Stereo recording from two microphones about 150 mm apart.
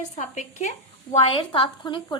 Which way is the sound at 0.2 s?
50° left (ahead or behind).